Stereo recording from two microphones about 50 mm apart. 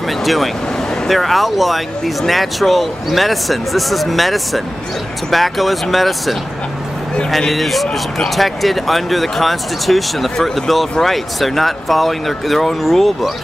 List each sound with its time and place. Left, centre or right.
0.2 s speech: centre